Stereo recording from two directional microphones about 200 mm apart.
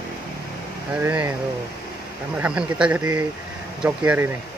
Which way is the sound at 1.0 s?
10° right (ahead or behind).